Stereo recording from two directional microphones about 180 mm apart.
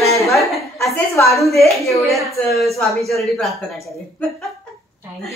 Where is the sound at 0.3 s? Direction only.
Centre (ahead or behind).